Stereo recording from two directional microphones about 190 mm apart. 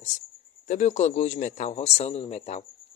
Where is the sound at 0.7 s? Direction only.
40° left (ahead or behind).